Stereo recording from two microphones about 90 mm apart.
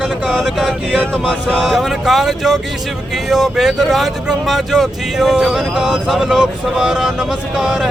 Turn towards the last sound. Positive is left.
turn(degrees=-5)  # may be behind; listen again after turning